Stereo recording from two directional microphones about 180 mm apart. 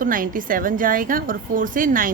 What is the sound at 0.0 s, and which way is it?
A woman's voice, 50° right (ahead or behind).